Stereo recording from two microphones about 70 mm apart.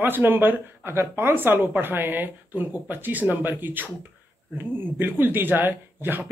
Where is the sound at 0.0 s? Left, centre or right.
Right.